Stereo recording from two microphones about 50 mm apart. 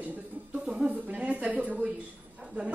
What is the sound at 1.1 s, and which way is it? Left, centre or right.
Speech, right.